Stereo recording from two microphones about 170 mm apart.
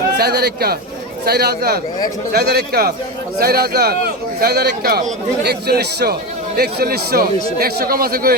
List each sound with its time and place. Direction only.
0.2 s a man's voice: 70° right (ahead or behind)